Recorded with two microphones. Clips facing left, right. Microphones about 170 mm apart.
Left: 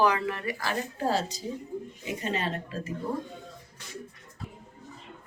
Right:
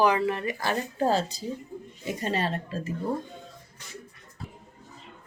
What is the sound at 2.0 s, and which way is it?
Speech, 35° right (ahead or behind).